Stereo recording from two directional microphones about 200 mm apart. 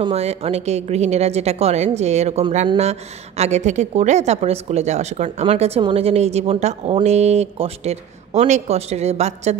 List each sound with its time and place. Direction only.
0.0 s a woman's voice: 30° right (ahead or behind)